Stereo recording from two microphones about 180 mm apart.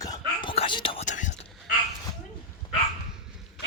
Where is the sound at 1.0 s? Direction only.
45° left (ahead or behind).